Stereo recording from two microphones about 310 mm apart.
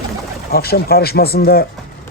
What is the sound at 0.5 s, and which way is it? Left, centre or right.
Speech, left.